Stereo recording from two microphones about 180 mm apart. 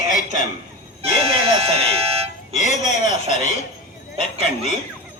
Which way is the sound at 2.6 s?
40° left (ahead or behind).